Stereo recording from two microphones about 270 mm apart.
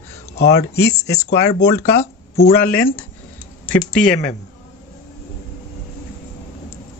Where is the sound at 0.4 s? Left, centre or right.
Left.